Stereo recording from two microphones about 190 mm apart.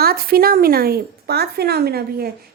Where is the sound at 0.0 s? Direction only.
50° right (ahead or behind).